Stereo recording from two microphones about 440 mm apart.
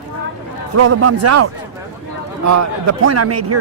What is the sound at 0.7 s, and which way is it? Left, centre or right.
A man's voice, right.